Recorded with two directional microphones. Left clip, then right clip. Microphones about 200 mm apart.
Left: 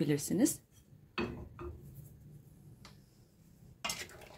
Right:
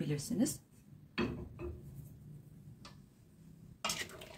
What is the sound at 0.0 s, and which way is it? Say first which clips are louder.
Speech: left 6 dB; 50° left (ahead or behind).